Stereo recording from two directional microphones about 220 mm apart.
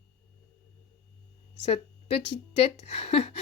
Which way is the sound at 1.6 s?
25° left (ahead or behind).